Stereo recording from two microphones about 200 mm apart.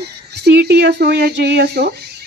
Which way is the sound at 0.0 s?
55° right (ahead or behind).